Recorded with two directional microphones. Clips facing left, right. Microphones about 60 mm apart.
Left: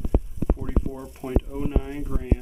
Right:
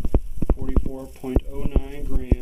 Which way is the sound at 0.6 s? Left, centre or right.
Left.